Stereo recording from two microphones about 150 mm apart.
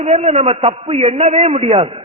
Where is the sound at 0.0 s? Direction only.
45° right (ahead or behind).